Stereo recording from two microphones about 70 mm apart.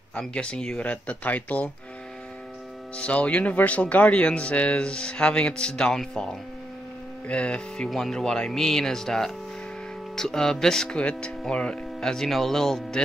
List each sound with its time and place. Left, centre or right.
0.1 s speech: centre
3.0 s speech: centre